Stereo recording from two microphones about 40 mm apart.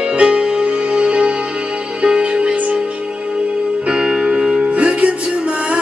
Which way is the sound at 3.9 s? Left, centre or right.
Right.